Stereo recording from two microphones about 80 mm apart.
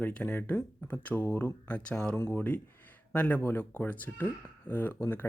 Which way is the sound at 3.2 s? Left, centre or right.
Left.